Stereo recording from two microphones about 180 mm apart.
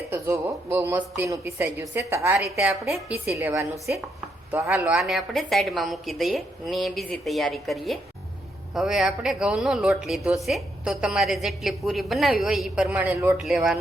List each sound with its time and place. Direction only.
0.1 s a woman's voice: 15° right (ahead or behind)
3.3 s a woman's voice: 15° right (ahead or behind)
4.9 s a woman's voice: centre (ahead or behind)